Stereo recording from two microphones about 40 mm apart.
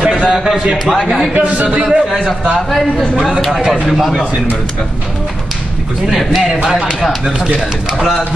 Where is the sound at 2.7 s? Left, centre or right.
Centre.